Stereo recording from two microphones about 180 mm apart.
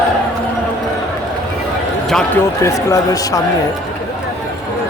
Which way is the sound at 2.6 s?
15° left (ahead or behind).